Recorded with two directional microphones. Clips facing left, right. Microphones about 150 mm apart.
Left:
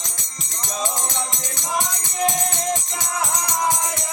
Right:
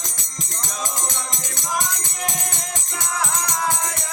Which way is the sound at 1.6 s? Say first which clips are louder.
Left 1 dB; 25° left (ahead or behind).